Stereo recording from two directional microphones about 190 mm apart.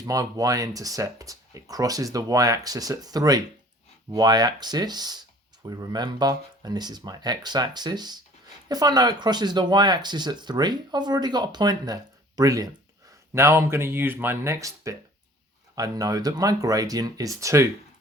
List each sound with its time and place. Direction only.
0.0 s speech: 20° right (ahead or behind)